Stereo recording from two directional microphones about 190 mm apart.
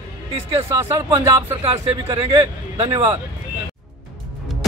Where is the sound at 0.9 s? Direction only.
15° right (ahead or behind).